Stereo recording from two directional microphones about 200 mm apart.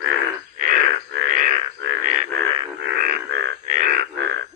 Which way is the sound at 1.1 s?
65° right (ahead or behind).